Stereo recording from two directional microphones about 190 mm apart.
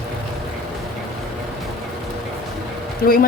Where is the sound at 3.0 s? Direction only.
50° left (ahead or behind).